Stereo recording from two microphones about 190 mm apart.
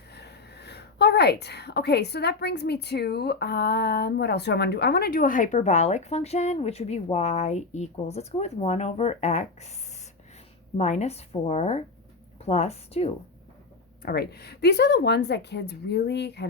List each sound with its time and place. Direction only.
0.1 s speech: 60° left (ahead or behind); by 9.7 s 35° left (ahead or behind)
10.8 s a woman's voice: 35° left (ahead or behind)
14.0 s speech: 55° left (ahead or behind)